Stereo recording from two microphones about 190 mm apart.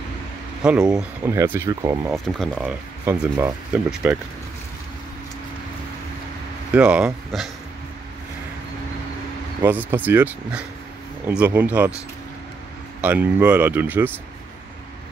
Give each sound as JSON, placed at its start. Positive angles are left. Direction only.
{"t": 0.6, "sound": "speech", "side_deg": -5}
{"t": 0.8, "sound": "speech", "side_deg": -20}
{"t": 2.0, "sound": "speech", "side_deg": 0}
{"t": 6.7, "sound": "speech", "side_deg": -5}
{"t": 9.6, "sound": "speech", "side_deg": -10}
{"t": 13.0, "sound": "speech", "side_deg": -10}